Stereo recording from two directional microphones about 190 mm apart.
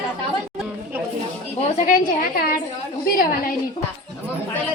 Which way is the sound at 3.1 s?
50° left (ahead or behind).